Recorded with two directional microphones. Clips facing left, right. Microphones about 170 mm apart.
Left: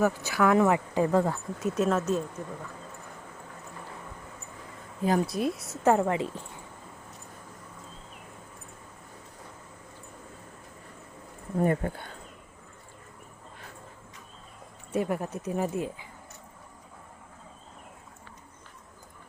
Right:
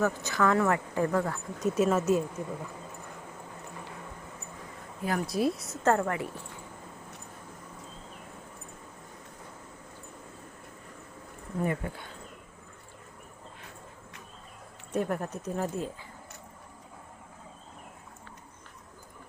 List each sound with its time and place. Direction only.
0.0 s speech: 10° left (ahead or behind)
1.5 s speech: centre (ahead or behind)
5.0 s a woman's voice: 20° left (ahead or behind)
5.3 s speech: centre (ahead or behind)
5.8 s a woman's voice: 15° left (ahead or behind)
11.5 s speech: 40° left (ahead or behind)
14.9 s speech: 5° left (ahead or behind)